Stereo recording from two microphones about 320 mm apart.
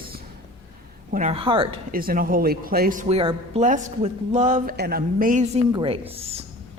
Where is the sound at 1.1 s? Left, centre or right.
Right.